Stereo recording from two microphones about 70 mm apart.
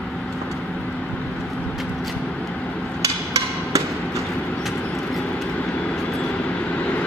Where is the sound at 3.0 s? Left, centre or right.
Right.